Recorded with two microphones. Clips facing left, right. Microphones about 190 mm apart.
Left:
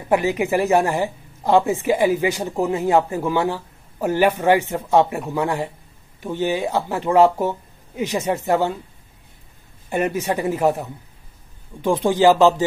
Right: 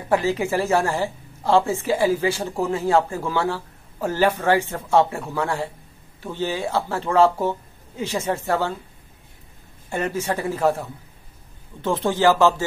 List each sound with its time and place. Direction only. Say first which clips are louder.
0.1 s speech: left 2 dB; 15° left (ahead or behind)
9.8 s speech: left 3 dB; 15° left (ahead or behind)